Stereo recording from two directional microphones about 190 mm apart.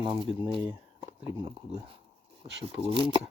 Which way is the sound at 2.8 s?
25° right (ahead or behind).